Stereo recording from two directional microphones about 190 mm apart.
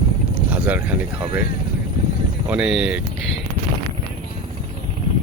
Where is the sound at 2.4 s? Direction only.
5° right (ahead or behind).